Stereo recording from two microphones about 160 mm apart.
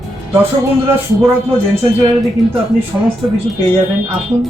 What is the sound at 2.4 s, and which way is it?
Speech, centre (ahead or behind).